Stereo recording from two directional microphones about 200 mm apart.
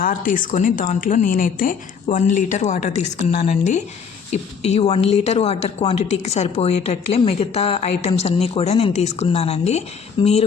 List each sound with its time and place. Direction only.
0.0 s speech: 40° left (ahead or behind)